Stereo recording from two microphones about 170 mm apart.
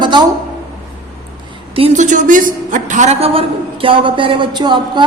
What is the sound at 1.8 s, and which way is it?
A man's voice, 45° right (ahead or behind).